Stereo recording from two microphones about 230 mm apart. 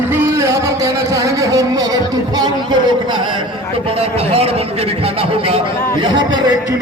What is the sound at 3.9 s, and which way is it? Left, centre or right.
A man's voice, right.